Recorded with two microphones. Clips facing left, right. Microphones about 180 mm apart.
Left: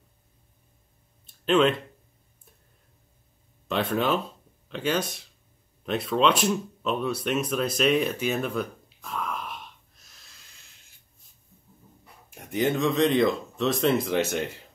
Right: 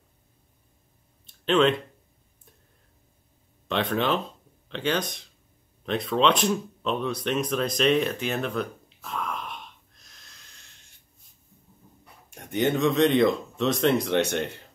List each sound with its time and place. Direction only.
1.2 s a sound: 5° left (ahead or behind)
3.6 s speech: 5° left (ahead or behind)
12.3 s speech: centre (ahead or behind)